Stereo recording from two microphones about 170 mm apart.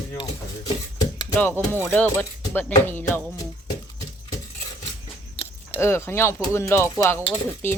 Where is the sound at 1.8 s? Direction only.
5° left (ahead or behind).